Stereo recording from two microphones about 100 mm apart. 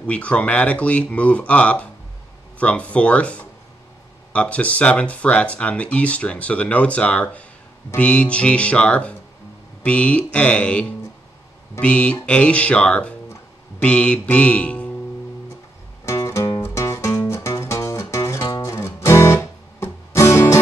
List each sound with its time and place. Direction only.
0.0 s speech: 10° left (ahead or behind)
16.1 s music: 30° left (ahead or behind)